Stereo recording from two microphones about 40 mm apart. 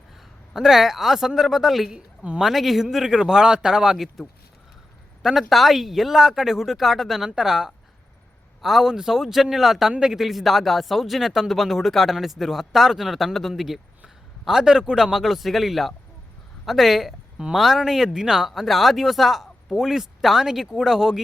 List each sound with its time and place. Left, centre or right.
0.5 s speech: centre
2.9 s speech: centre
5.2 s speech: centre
14.6 s a woman's voice: centre